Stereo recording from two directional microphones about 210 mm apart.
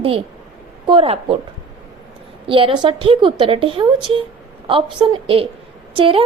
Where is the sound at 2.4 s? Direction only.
25° right (ahead or behind).